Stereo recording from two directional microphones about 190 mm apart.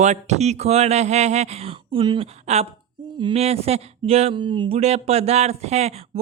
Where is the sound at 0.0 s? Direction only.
35° right (ahead or behind).